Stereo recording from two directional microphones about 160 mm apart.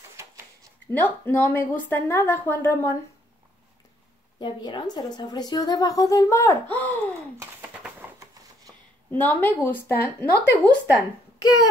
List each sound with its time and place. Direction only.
0.9 s a woman's voice: 15° left (ahead or behind)
4.4 s speech: 30° left (ahead or behind); by 7.1 s 10° left (ahead or behind)
7.3 s a sound: 10° right (ahead or behind)
8.2 s shuffling cards: 20° right (ahead or behind)
9.2 s a woman's voice: 10° left (ahead or behind)